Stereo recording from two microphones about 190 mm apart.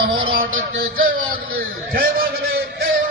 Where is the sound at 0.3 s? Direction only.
50° right (ahead or behind).